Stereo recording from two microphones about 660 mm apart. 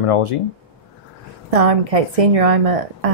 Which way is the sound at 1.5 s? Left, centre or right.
Right.